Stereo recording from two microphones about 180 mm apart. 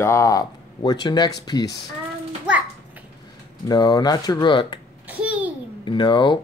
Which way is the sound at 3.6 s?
20° left (ahead or behind).